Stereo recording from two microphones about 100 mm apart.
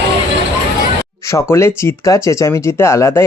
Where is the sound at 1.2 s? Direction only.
30° left (ahead or behind).